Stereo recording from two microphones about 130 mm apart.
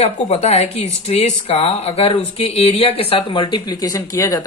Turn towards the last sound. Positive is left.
turn(degrees=30)  # may be behind; listen again after turning